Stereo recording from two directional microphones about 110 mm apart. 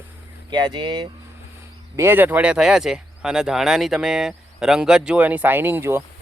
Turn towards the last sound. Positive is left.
turn(degrees=-20)  # may be behind; listen again after turning